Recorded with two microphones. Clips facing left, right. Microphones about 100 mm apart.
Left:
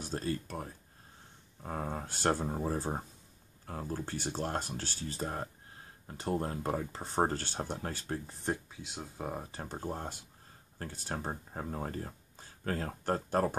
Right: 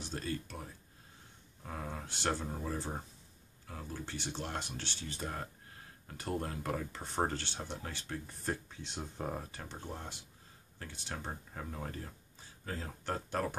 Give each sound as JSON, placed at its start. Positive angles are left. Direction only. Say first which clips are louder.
{"t": 0.0, "sound": "speech", "louder": "left 4 dB", "side_deg": 40}
{"t": 8.6, "sound": "speech", "louder": "even", "side_deg": 5}
{"t": 9.5, "sound": "speech", "louder": "left 6 dB", "side_deg": 40}
{"t": 12.4, "sound": "a sound", "louder": "left 7 dB", "side_deg": 55}
{"t": 13.0, "sound": "speech", "louder": "left 5 dB", "side_deg": 40}